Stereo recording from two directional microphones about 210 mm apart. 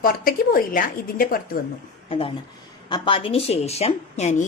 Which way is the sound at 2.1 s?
25° left (ahead or behind).